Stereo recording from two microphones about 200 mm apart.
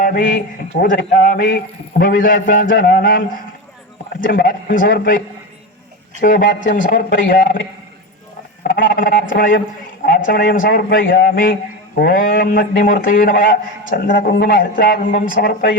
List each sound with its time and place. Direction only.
0.0 s a man's voice: 40° left (ahead or behind)
8.6 s a man's voice: 45° left (ahead or behind)